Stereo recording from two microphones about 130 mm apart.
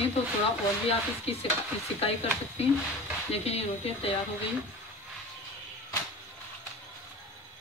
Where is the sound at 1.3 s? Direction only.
50° left (ahead or behind).